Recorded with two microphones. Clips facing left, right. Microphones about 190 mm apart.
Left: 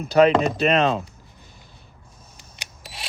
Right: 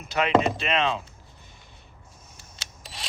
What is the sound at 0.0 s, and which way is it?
Speech, 35° left (ahead or behind).